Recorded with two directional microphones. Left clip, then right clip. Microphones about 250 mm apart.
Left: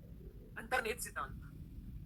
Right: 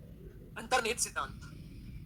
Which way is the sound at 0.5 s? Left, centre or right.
Right.